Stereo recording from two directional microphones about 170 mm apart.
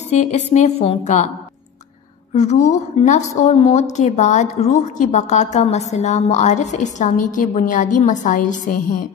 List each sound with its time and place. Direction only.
0.1 s a woman's voice: 40° left (ahead or behind)
2.3 s a woman's voice: 45° left (ahead or behind)